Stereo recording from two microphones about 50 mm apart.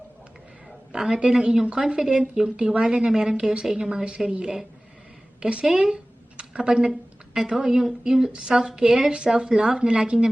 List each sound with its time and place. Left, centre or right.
0.9 s a woman's voice: centre